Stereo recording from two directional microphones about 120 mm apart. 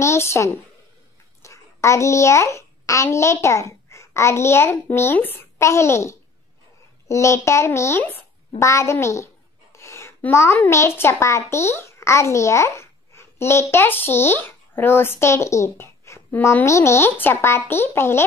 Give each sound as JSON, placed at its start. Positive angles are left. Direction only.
{"t": 0.0, "sound": "a child's voice", "side_deg": 20}